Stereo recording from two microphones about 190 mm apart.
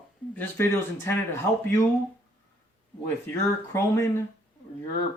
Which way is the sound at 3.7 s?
15° left (ahead or behind).